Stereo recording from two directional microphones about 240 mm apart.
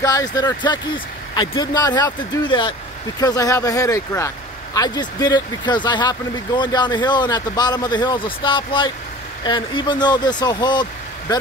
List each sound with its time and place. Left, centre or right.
0.0 s speech: centre